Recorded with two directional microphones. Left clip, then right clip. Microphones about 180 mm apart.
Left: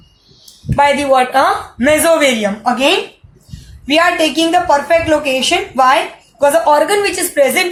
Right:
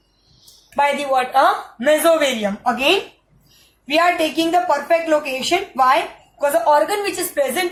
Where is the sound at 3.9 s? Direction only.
25° left (ahead or behind).